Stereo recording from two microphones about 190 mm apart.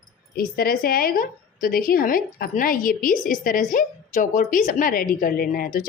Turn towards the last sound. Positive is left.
turn(degrees=50)  # may be behind; listen again after turning